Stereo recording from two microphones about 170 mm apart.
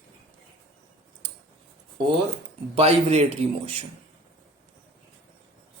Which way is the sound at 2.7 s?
35° right (ahead or behind).